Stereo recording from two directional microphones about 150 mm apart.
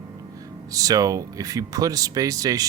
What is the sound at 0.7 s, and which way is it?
Speech, 25° right (ahead or behind).